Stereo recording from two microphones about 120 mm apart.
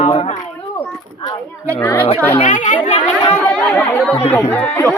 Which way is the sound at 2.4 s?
90° left.